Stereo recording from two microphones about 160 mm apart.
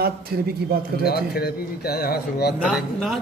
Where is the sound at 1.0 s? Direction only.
75° left (ahead or behind).